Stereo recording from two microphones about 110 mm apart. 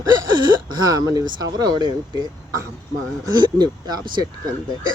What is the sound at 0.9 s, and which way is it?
Speech, 35° right (ahead or behind).